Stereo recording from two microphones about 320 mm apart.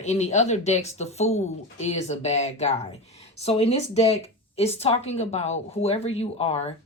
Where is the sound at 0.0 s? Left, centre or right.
Left.